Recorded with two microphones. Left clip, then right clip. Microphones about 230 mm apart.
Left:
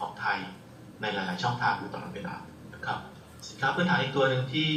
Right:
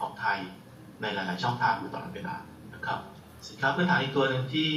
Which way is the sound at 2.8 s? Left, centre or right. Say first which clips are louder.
Right 1 dB; left.